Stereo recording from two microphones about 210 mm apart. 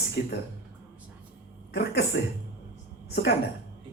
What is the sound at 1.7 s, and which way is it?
Speech, 50° left (ahead or behind).